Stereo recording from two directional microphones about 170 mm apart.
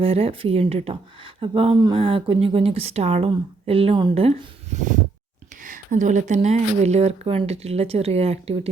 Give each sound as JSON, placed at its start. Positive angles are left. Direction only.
{"t": 0.0, "sound": "speech", "side_deg": -35}